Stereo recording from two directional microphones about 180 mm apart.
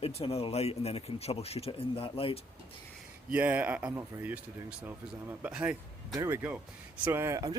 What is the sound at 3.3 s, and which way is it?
Speech, 10° right (ahead or behind).